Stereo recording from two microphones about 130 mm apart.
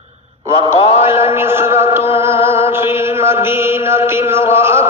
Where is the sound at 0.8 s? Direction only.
45° left (ahead or behind).